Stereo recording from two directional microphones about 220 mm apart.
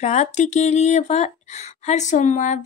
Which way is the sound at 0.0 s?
30° left (ahead or behind).